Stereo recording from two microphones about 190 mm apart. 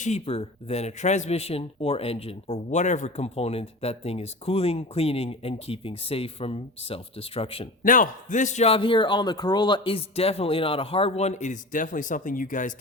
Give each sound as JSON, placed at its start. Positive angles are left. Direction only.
{"t": 0.0, "sound": "speech", "side_deg": 35}
{"t": 7.9, "sound": "speech", "side_deg": 45}